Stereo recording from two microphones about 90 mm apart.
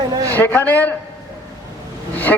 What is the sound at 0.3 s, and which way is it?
Speech, 25° left (ahead or behind).